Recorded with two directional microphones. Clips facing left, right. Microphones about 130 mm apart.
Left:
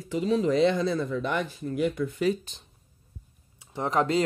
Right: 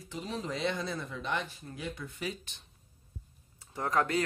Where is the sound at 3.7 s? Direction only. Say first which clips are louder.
Left 5 dB; 25° left (ahead or behind).